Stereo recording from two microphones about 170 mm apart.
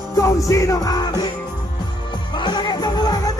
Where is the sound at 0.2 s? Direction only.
20° left (ahead or behind).